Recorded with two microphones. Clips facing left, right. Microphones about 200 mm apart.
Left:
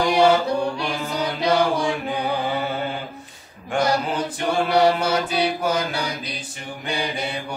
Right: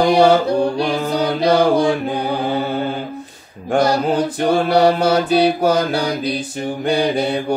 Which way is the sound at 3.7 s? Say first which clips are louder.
Right 6 dB; 35° right (ahead or behind).